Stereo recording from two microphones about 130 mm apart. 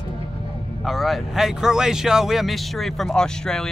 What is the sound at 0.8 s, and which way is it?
Speech, centre (ahead or behind).